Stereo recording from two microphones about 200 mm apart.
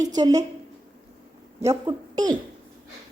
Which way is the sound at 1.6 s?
20° right (ahead or behind).